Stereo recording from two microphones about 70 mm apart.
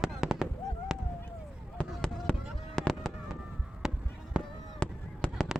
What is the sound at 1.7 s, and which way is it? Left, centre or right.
Fireworks, centre.